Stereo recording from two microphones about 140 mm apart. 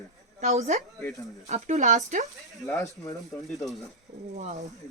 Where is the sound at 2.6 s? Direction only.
25° left (ahead or behind).